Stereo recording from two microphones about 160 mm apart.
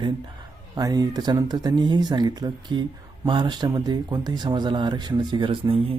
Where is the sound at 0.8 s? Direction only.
25° right (ahead or behind).